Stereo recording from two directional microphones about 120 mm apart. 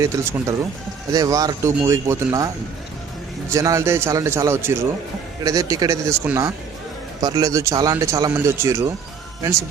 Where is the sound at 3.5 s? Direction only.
25° right (ahead or behind).